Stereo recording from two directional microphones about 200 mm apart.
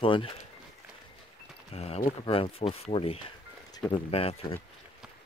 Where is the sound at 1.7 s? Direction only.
30° left (ahead or behind).